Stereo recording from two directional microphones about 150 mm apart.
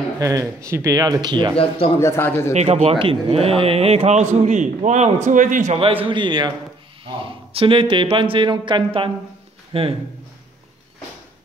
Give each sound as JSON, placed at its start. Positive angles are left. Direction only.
{"t": 0.2, "sound": "speech", "side_deg": -20}
{"t": 1.6, "sound": "a man's voice", "side_deg": 35}
{"t": 2.0, "sound": "a man's voice", "side_deg": 15}
{"t": 2.5, "sound": "a man's voice", "side_deg": -45}
{"t": 5.7, "sound": "a man's voice", "side_deg": -40}